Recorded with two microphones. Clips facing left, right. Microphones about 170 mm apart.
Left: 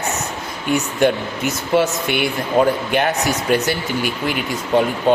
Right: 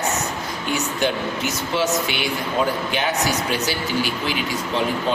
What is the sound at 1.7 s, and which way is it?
Speech, 55° left (ahead or behind).